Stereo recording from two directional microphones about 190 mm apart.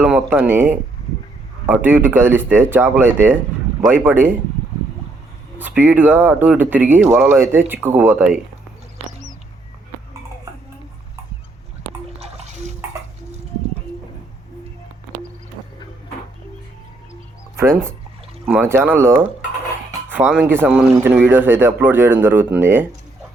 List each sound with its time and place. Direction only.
0.0 s speech: 10° right (ahead or behind)
5.5 s speech: 10° right (ahead or behind)
12.2 s water: 35° right (ahead or behind)
18.4 s speech: 10° right (ahead or behind)